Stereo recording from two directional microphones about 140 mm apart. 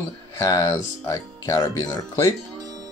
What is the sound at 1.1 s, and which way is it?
Speech, 25° left (ahead or behind).